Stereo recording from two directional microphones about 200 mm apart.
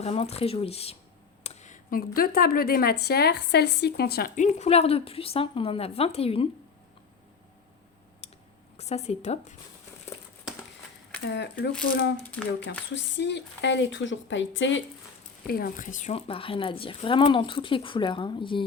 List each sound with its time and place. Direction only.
0.0 s a woman's voice: 30° left (ahead or behind); by 4.4 s 50° left (ahead or behind)
4.4 s a woman's voice: 35° left (ahead or behind)
8.8 s speech: 35° left (ahead or behind)
11.3 s speech: 55° left (ahead or behind)
12.2 s speech: 5° left (ahead or behind)
12.6 s speech: 60° left (ahead or behind)
15.4 s a woman's voice: 50° left (ahead or behind); by 18.6 s 25° left (ahead or behind)